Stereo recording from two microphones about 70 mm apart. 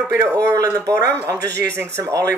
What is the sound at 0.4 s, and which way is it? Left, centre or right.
Speech, right.